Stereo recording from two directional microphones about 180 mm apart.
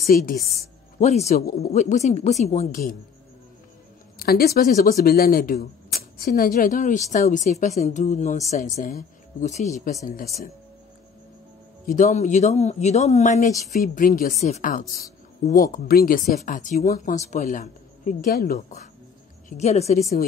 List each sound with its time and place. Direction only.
0.0 s speech: 55° left (ahead or behind)
0.9 s speech: 40° left (ahead or behind)
1.4 s speech: 55° left (ahead or behind)
1.7 s speech: 40° left (ahead or behind)
4.2 s speech: 60° left (ahead or behind); by 9.9 s 40° left (ahead or behind)
11.8 s speech: 45° left (ahead or behind)